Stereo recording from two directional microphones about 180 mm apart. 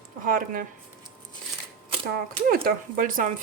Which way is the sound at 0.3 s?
50° right (ahead or behind).